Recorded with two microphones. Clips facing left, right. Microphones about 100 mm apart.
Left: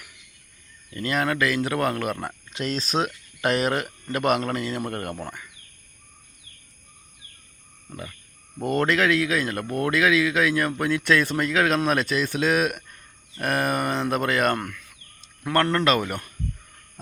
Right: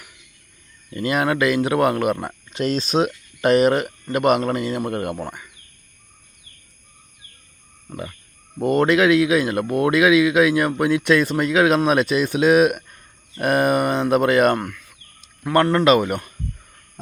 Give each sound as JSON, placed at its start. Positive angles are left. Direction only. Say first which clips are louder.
{"t": 0.9, "sound": "speech", "louder": "right 4 dB", "side_deg": -15}
{"t": 7.9, "sound": "a sound", "louder": "right 6 dB", "side_deg": -25}
{"t": 8.5, "sound": "speech", "louder": "right 6 dB", "side_deg": -15}
{"t": 14.6, "sound": "speech", "louder": "right 4 dB", "side_deg": -5}